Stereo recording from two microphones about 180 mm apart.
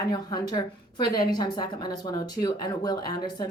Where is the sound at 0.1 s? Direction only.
20° left (ahead or behind).